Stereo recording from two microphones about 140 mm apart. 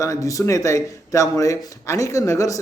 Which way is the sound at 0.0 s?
20° left (ahead or behind).